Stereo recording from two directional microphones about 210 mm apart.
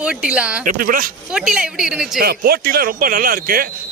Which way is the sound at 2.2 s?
45° right (ahead or behind).